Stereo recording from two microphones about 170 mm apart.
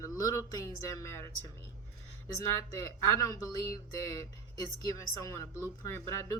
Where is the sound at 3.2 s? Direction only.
20° left (ahead or behind).